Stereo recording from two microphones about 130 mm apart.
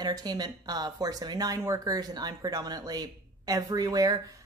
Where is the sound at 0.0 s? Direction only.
30° right (ahead or behind).